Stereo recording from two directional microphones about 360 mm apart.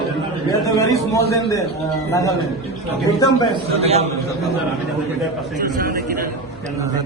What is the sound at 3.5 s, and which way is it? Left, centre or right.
Speech, centre.